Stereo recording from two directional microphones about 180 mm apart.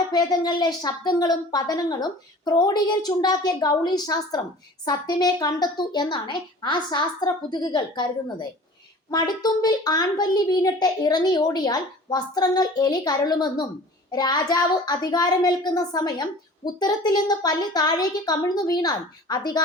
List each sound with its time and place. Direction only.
0.1 s a child's voice: 20° left (ahead or behind)